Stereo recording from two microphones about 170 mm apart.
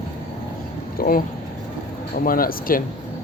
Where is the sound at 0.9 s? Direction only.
60° left (ahead or behind).